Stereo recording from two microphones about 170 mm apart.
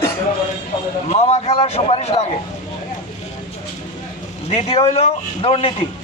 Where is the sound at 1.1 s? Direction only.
40° left (ahead or behind).